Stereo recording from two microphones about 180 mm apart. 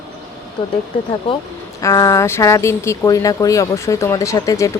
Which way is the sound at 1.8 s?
20° left (ahead or behind).